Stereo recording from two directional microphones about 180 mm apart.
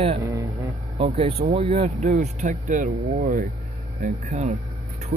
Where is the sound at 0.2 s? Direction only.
15° right (ahead or behind).